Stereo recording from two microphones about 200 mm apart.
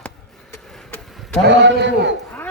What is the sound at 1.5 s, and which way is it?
Speech, 60° right (ahead or behind).